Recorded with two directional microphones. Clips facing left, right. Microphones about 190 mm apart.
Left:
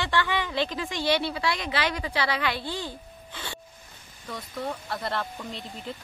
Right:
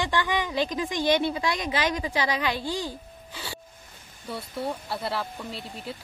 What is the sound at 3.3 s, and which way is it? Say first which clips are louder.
Music: even; 10° right (ahead or behind).